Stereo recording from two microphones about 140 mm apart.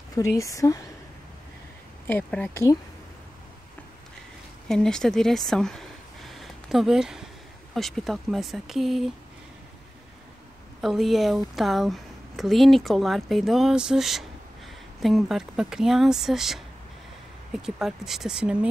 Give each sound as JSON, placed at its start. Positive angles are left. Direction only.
{"t": 0.4, "sound": "speech", "side_deg": 25}
{"t": 2.0, "sound": "speech", "side_deg": 10}
{"t": 4.6, "sound": "a woman's voice", "side_deg": 5}
{"t": 10.8, "sound": "a woman's voice", "side_deg": 0}